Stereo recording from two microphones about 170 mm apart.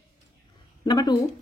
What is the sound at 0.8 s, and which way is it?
Speech, 25° left (ahead or behind).